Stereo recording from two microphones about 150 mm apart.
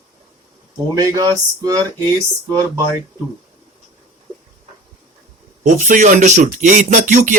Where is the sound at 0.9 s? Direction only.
25° right (ahead or behind).